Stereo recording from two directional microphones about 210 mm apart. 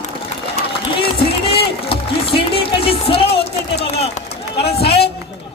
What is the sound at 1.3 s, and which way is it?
Music, 25° left (ahead or behind).